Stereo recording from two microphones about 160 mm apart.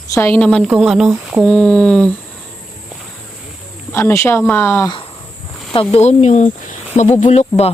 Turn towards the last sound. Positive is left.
turn(degrees=45)  # may be behind; listen again after turning